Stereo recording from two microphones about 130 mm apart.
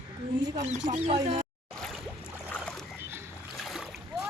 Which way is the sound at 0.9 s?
55° right (ahead or behind).